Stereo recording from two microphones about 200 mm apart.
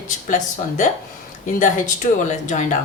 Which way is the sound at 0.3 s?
40° left (ahead or behind).